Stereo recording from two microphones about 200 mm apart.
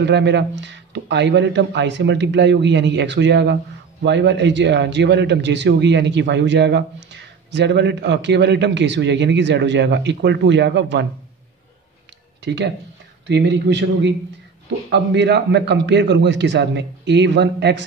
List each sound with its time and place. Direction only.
0.0 s a man's voice: 60° right (ahead or behind)
12.4 s a man's voice: 55° right (ahead or behind)